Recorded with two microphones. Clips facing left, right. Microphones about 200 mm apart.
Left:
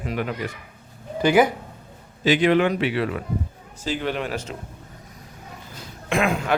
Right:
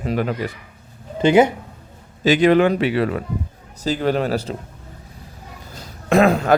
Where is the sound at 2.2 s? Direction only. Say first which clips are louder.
Right 4 dB; 40° right (ahead or behind).